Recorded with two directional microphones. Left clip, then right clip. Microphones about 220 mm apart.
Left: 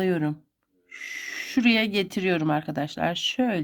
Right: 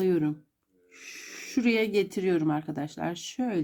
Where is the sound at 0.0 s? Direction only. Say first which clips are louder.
Even; 35° left (ahead or behind).